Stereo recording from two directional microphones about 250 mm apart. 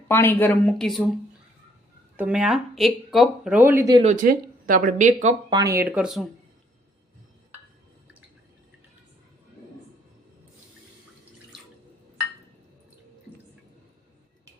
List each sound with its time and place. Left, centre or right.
0.1 s speech: centre
2.1 s speech: centre
4.0 s speech: right
5.5 s speech: centre